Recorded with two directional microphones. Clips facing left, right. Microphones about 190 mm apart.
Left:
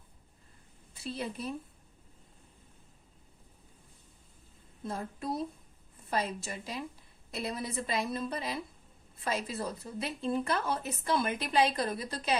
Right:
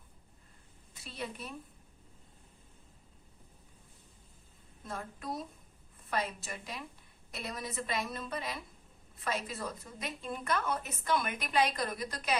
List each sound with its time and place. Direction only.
1.0 s a woman's voice: 30° left (ahead or behind)
4.9 s a woman's voice: 30° left (ahead or behind)